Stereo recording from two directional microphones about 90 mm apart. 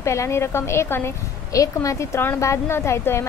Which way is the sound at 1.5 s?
40° left (ahead or behind).